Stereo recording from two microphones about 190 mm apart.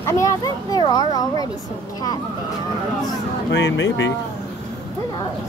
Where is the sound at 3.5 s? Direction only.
75° left (ahead or behind).